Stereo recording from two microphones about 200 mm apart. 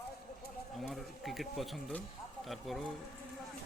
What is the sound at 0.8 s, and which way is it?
Speech, centre (ahead or behind).